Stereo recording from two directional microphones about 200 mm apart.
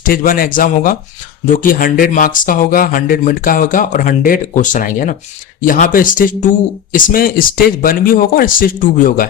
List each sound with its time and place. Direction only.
0.0 s speech: 45° left (ahead or behind)